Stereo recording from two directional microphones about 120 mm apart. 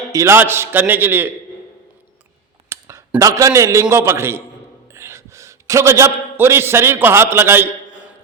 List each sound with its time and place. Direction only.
0.1 s a man's voice: 25° right (ahead or behind)
2.6 s a sound: 25° right (ahead or behind)
3.2 s a man's voice: 30° right (ahead or behind)